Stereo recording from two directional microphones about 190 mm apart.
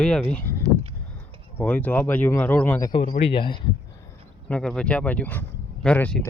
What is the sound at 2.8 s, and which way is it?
Speech, 25° left (ahead or behind).